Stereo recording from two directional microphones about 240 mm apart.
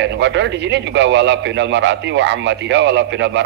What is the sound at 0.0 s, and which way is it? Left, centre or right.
A man's voice, right.